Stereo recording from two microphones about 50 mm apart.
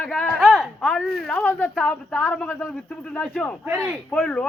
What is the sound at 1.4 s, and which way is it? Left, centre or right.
Speech, left.